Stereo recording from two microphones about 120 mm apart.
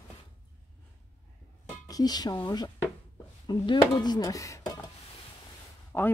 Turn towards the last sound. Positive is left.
turn(degrees=15)  # may be behind; listen again after turning